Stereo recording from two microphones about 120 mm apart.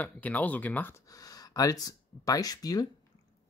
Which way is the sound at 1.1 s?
30° left (ahead or behind).